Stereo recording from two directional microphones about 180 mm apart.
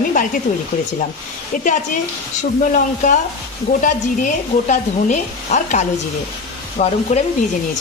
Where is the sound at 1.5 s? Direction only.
45° left (ahead or behind).